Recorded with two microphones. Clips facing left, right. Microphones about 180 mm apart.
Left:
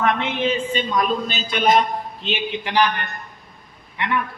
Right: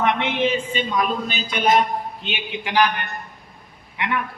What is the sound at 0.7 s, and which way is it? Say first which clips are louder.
A man's voice: left 1 dB; 15° right (ahead or behind).